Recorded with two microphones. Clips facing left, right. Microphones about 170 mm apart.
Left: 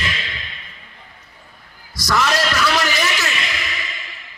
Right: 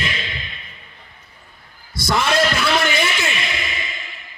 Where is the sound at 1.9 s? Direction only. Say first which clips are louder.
Right 1 dB; 30° right (ahead or behind).